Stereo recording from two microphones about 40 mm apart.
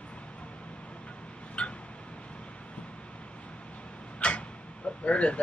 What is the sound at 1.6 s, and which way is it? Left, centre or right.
Vehicle, left.